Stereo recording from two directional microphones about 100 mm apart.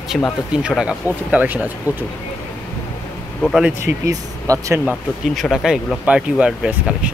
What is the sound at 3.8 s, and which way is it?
Speech, 30° right (ahead or behind).